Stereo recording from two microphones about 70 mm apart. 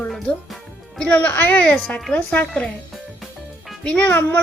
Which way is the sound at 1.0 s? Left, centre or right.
Centre.